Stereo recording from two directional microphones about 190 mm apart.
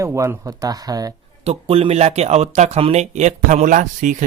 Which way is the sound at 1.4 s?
30° right (ahead or behind).